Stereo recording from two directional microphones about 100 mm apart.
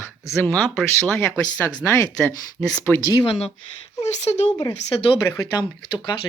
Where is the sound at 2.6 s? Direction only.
15° left (ahead or behind).